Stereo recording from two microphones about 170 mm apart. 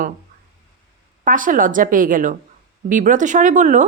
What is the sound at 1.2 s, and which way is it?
A woman's voice, 50° right (ahead or behind).